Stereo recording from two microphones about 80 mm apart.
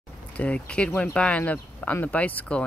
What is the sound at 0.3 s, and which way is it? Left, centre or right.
Speech, centre.